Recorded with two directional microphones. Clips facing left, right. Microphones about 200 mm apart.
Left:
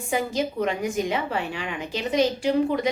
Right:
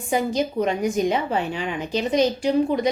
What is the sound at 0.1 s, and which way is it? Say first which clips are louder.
A woman's voice: right 3 dB; 20° right (ahead or behind).